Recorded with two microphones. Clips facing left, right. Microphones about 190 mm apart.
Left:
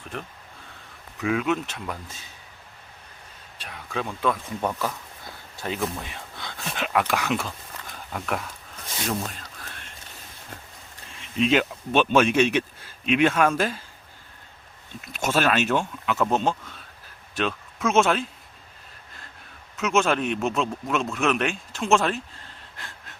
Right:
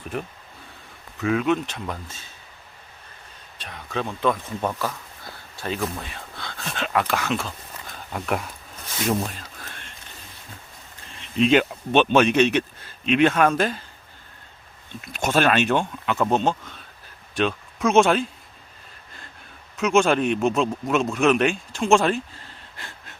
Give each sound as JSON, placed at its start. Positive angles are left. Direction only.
{"t": 1.2, "sound": "a man's voice", "side_deg": 5}
{"t": 2.0, "sound": "speech", "side_deg": 15}
{"t": 3.6, "sound": "a man's voice", "side_deg": 5}
{"t": 5.5, "sound": "speech", "side_deg": 15}
{"t": 6.0, "sound": "a sound", "side_deg": 15}
{"t": 7.1, "sound": "speech", "side_deg": 10}
{"t": 7.9, "sound": "a sound", "side_deg": -5}
{"t": 11.2, "sound": "a man's voice", "side_deg": 5}
{"t": 15.0, "sound": "a man's voice", "side_deg": 5}
{"t": 19.7, "sound": "a man's voice", "side_deg": 5}